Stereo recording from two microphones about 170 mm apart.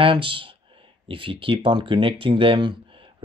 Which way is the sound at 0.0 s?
30° right (ahead or behind).